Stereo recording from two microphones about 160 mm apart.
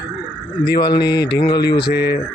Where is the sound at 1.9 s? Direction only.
90° left.